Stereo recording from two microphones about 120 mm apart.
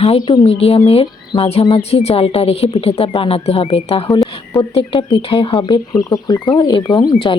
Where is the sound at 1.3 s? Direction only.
40° left (ahead or behind).